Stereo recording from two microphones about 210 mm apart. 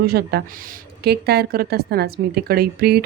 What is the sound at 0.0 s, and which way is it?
Speech, 50° right (ahead or behind).